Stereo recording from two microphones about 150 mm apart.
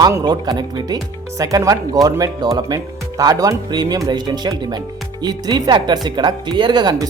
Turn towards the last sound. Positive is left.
turn(degrees=-30)  # may be behind; listen again after turning